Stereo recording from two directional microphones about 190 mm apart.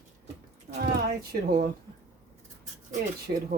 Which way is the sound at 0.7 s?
50° right (ahead or behind).